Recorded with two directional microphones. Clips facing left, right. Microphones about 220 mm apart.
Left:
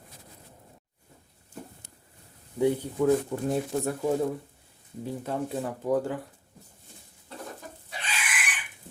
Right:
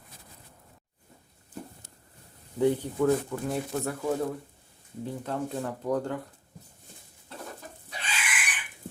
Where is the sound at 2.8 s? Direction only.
10° left (ahead or behind).